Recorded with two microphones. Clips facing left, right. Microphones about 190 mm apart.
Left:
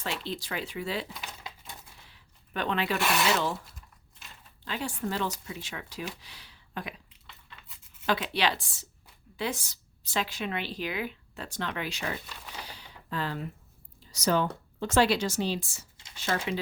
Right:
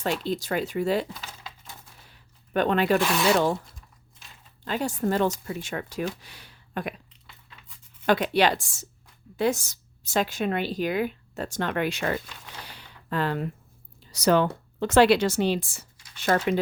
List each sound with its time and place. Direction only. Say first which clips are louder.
0.0 s speech: right 8 dB; 45° right (ahead or behind)
2.0 s a sound: right 3 dB; 45° right (ahead or behind)
3.0 s speech: right 3 dB; centre (ahead or behind)
4.6 s speech: right 7 dB; 45° right (ahead or behind)
8.0 s speech: right 7 dB; 50° right (ahead or behind)
12.6 s a sound: right 4 dB; 60° right (ahead or behind)
14.1 s a woman's voice: right 6 dB; 65° right (ahead or behind)